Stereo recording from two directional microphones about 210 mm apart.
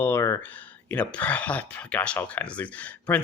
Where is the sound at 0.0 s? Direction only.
15° left (ahead or behind).